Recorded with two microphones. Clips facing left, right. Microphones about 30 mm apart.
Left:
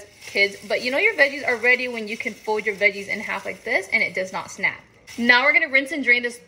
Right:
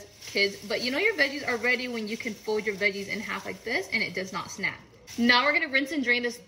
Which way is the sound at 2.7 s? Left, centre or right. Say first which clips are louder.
Left 5 dB; left.